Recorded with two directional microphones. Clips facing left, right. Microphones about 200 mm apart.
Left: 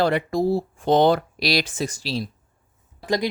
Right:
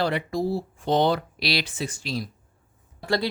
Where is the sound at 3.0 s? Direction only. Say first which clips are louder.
Left 2 dB; 15° left (ahead or behind).